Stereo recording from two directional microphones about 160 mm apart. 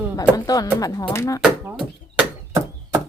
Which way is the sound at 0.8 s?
25° left (ahead or behind).